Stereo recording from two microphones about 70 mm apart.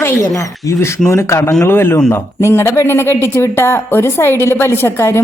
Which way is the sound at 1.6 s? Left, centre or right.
Left.